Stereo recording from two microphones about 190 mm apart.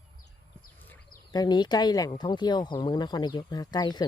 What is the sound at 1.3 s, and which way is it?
Speech, 20° left (ahead or behind).